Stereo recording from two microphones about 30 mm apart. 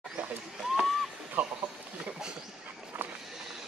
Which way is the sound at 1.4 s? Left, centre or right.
Right.